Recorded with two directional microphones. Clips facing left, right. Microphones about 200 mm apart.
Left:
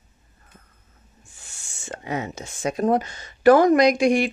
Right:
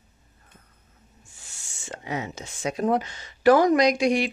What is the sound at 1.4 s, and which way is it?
Speech, 55° left (ahead or behind).